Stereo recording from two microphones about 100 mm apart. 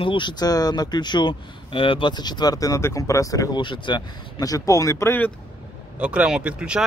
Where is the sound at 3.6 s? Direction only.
50° left (ahead or behind).